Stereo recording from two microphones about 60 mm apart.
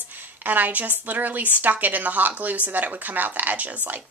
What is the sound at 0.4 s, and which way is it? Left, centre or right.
A woman's voice, right.